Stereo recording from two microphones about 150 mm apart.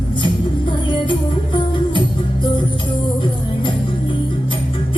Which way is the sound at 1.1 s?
35° left (ahead or behind).